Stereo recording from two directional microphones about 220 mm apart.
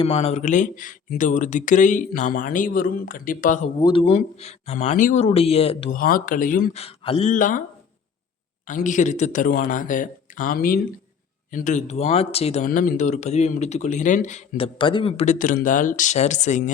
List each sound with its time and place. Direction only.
0.0 s speech: 25° left (ahead or behind)
3.8 s speech: 20° left (ahead or behind)
6.0 s speech: 40° left (ahead or behind)
6.8 s speech: 25° left (ahead or behind)
8.6 s speech: 35° left (ahead or behind)
14.8 s speech: 25° left (ahead or behind)